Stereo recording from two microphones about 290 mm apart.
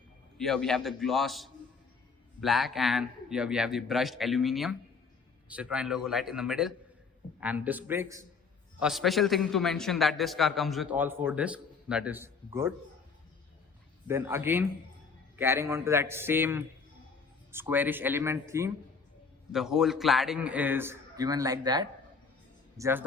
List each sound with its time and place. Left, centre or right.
0.3 s a man's voice: centre
14.1 s a man's voice: centre